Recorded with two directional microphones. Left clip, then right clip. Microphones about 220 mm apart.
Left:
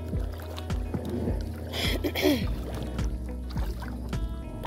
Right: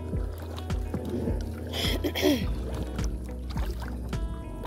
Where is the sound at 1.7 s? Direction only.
Centre (ahead or behind).